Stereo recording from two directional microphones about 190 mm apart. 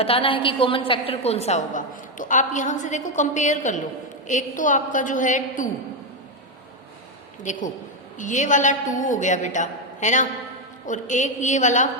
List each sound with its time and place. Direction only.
0.0 s a woman's voice: 30° left (ahead or behind)
7.5 s a woman's voice: 40° left (ahead or behind)